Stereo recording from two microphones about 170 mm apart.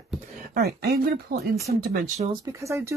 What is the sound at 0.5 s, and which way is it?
Speech, 70° right (ahead or behind).